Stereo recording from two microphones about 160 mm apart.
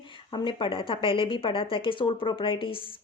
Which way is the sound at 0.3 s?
30° left (ahead or behind).